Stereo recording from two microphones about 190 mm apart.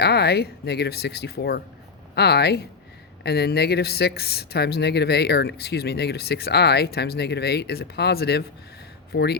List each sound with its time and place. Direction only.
0.0 s speech: 60° left (ahead or behind)